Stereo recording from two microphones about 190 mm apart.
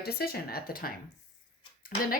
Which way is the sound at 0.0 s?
55° left (ahead or behind).